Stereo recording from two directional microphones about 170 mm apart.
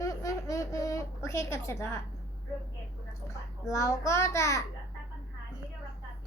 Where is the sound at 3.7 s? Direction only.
20° left (ahead or behind).